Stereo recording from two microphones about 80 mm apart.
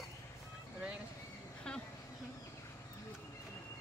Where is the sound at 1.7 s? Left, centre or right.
Centre.